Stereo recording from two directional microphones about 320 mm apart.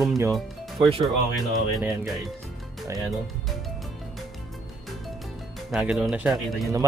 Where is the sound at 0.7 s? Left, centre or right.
Centre.